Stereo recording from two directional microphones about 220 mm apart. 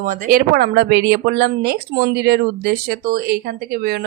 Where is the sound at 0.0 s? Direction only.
40° right (ahead or behind).